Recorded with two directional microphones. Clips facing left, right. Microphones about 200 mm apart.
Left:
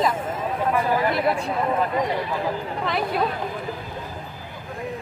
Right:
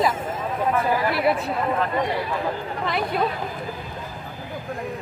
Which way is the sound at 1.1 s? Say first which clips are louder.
Right 1 dB; 5° right (ahead or behind).